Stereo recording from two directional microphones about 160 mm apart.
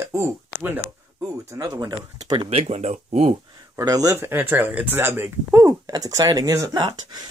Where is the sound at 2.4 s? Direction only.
40° right (ahead or behind).